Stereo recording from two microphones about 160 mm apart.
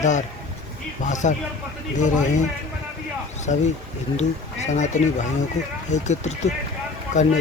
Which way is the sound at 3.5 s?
40° left (ahead or behind).